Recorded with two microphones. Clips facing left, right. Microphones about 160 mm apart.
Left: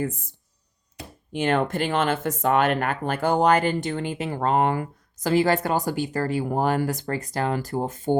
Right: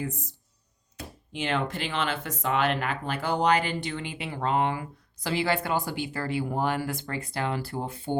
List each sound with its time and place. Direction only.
0.0 s speech: 55° left (ahead or behind)